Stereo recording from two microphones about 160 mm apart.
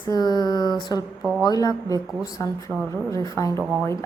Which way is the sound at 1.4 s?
25° left (ahead or behind).